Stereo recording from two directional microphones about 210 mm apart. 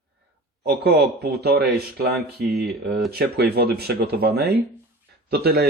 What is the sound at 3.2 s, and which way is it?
Speech, 50° right (ahead or behind).